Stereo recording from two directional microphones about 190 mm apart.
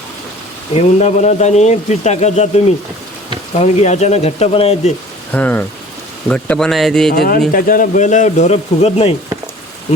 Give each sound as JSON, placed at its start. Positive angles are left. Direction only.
{"t": 0.7, "sound": "speech", "side_deg": 35}
{"t": 5.3, "sound": "speech", "side_deg": 10}
{"t": 7.1, "sound": "speech", "side_deg": 50}